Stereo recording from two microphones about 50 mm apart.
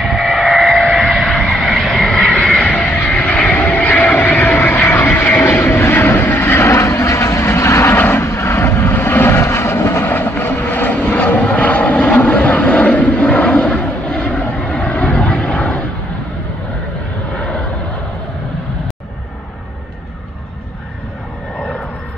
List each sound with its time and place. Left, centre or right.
0.0 s vehicle: centre
2.8 s music: left
3.2 s vehicle: left
5.6 s vehicle: left
6.5 s vehicle: left
10.0 s vehicle: left
17.4 s vehicle: centre